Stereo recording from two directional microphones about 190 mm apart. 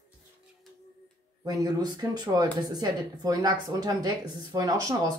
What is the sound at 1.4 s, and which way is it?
Speech, 20° right (ahead or behind).